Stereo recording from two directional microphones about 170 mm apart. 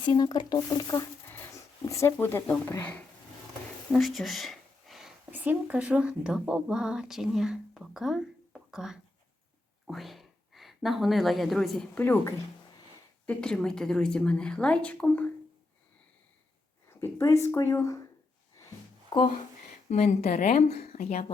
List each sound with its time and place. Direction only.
0.0 s speech: 25° left (ahead or behind)
1.3 s a sound: 15° left (ahead or behind)
2.1 s speech: 10° left (ahead or behind)
3.9 s a woman's voice: centre (ahead or behind)
16.9 s speech: 15° left (ahead or behind)
19.1 s speech: 30° left (ahead or behind)
19.9 s speech: 40° left (ahead or behind)